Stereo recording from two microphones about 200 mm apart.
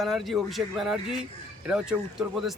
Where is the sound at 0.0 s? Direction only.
Centre (ahead or behind).